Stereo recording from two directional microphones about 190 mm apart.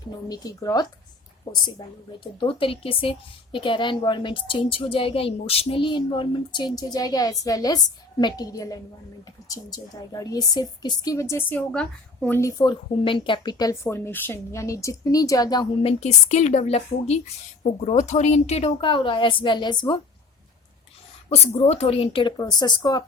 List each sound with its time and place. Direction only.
0.3 s a woman's voice: 20° left (ahead or behind)
2.4 s a woman's voice: 30° left (ahead or behind)
21.2 s a woman's voice: 35° left (ahead or behind)